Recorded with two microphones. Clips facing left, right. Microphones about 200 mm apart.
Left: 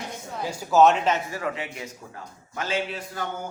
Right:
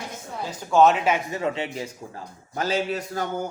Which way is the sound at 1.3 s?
25° right (ahead or behind).